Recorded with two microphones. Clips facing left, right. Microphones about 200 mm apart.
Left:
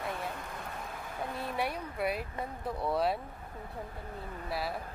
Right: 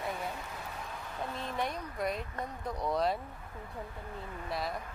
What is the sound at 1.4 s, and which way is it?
Speech, 10° left (ahead or behind).